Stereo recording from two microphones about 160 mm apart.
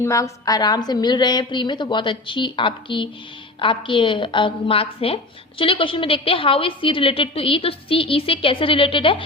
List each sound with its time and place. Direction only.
0.0 s a woman's voice: 20° left (ahead or behind)